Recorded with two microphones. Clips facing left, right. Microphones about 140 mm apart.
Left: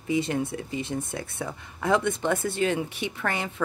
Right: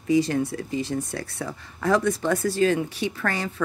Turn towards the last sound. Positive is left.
turn(degrees=20)  # may be behind; listen again after turning